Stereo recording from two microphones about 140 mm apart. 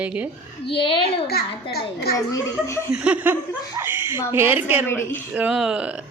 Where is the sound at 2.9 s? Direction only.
10° right (ahead or behind).